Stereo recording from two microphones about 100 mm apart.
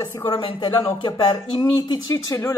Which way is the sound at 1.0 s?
50° left (ahead or behind).